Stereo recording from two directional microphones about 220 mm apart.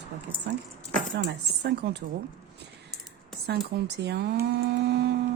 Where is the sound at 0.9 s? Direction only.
45° right (ahead or behind).